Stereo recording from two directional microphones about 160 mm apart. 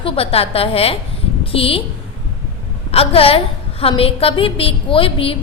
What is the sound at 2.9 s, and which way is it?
A woman's voice, 35° left (ahead or behind).